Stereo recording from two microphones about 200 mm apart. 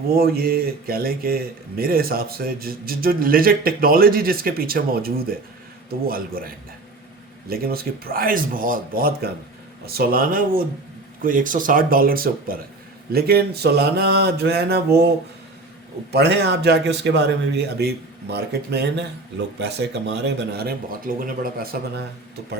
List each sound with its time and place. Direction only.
0.1 s speech: 50° right (ahead or behind)
16.1 s a man's voice: 55° right (ahead or behind)